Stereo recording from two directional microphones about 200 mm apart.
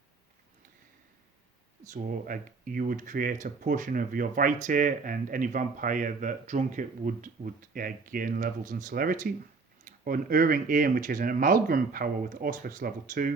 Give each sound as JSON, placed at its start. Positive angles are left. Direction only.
{"t": 1.9, "sound": "speech", "side_deg": -40}